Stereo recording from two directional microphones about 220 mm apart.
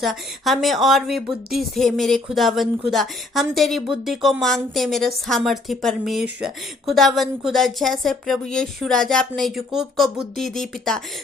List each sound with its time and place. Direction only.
0.0 s a woman's voice: centre (ahead or behind)